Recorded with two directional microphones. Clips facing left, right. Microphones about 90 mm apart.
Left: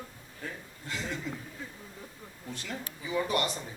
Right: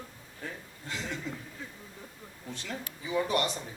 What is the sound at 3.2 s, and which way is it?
Speech, 30° right (ahead or behind).